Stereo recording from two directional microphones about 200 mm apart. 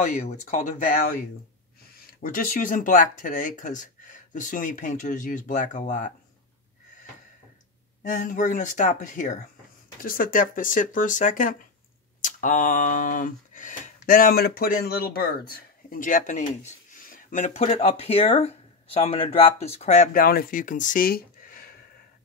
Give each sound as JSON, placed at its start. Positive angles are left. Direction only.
{"t": 0.0, "sound": "speech", "side_deg": 40}
{"t": 8.0, "sound": "speech", "side_deg": 40}
{"t": 12.2, "sound": "a sound", "side_deg": 40}